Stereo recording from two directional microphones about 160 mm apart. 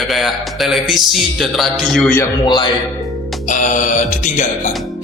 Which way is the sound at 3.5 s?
50° left (ahead or behind).